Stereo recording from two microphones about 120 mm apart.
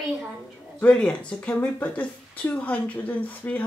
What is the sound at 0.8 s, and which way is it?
A woman's voice, 10° left (ahead or behind).